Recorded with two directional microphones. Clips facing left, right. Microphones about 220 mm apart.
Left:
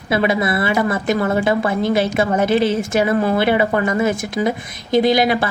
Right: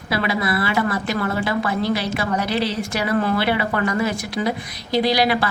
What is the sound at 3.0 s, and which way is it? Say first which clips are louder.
A woman's voice: left 1 dB; 20° left (ahead or behind).